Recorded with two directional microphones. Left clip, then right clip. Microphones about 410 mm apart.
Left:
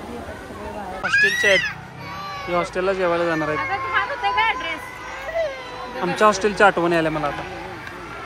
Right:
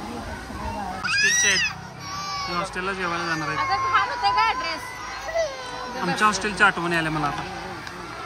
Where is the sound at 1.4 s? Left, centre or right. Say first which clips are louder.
Left 3 dB; centre.